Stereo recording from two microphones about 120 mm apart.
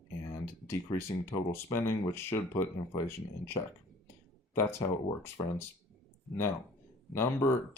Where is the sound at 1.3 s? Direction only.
20° left (ahead or behind).